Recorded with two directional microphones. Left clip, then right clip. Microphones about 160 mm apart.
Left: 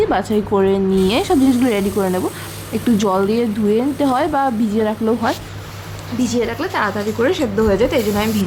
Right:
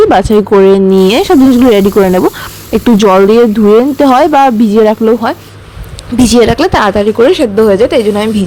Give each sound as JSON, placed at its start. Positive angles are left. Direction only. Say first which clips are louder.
{"t": 0.1, "sound": "speech", "louder": "right 11 dB", "side_deg": -50}
{"t": 6.1, "sound": "speech", "louder": "right 13 dB", "side_deg": -90}